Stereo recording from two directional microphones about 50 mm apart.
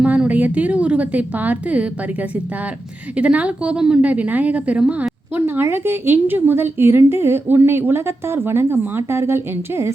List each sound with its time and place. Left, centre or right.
0.0 s a woman's voice: right
3.2 s speech: right
3.8 s a woman's voice: centre
4.0 s speech: right
5.3 s a sound: right
5.6 s a woman's voice: right